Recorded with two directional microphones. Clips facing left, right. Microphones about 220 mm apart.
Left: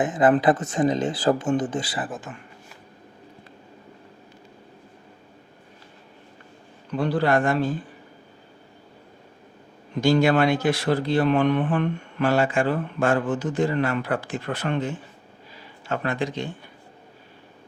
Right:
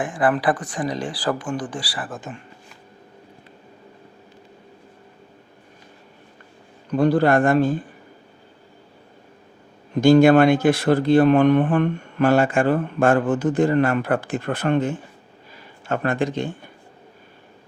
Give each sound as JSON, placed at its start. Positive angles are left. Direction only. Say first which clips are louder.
{"t": 0.0, "sound": "speech", "louder": "left 2 dB", "side_deg": 20}
{"t": 2.3, "sound": "speech", "louder": "right 4 dB", "side_deg": -25}
{"t": 6.9, "sound": "speech", "louder": "right 5 dB", "side_deg": -45}
{"t": 10.0, "sound": "speech", "louder": "right 6 dB", "side_deg": -50}